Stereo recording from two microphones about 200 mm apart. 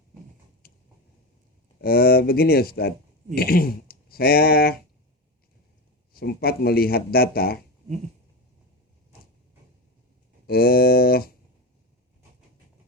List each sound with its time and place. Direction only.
0.6 s a sound: 50° left (ahead or behind)
1.8 s a man's voice: 50° left (ahead or behind)
6.1 s a man's voice: 50° left (ahead or behind)
10.4 s a man's voice: 50° left (ahead or behind)